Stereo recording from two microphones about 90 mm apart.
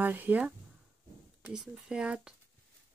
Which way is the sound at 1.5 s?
5° right (ahead or behind).